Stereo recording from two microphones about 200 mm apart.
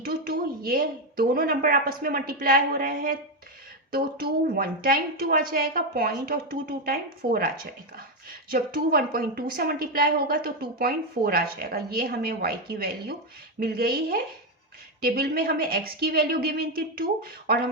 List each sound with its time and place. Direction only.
0.0 s a woman's voice: 45° right (ahead or behind)